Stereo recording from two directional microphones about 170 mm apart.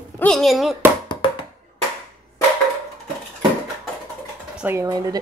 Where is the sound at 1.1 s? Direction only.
30° left (ahead or behind).